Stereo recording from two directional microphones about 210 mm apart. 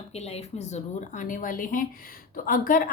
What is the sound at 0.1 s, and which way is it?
A woman's voice, 30° left (ahead or behind).